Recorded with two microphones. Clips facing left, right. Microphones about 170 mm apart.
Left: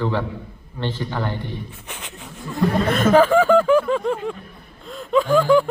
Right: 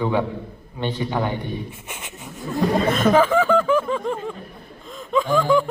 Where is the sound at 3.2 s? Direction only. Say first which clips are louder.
Left 3 dB; 40° left (ahead or behind).